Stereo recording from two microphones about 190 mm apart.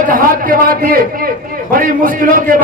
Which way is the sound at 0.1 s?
45° right (ahead or behind).